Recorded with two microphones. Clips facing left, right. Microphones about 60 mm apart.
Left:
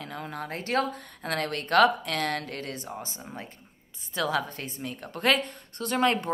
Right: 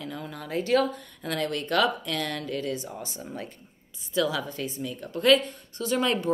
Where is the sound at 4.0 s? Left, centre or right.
Left.